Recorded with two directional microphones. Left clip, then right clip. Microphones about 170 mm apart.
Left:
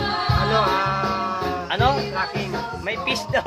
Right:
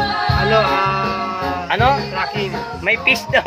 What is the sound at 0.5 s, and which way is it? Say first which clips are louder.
Music: right 5 dB; 20° right (ahead or behind).